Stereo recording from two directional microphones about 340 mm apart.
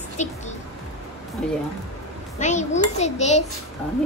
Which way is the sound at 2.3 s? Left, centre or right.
Left.